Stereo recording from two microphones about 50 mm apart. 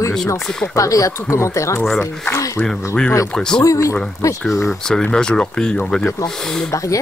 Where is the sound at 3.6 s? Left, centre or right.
Left.